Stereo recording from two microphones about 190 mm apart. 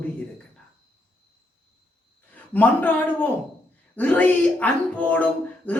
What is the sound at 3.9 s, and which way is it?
Speech, 10° left (ahead or behind).